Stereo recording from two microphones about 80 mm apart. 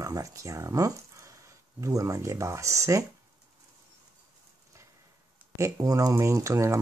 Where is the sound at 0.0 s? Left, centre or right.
Right.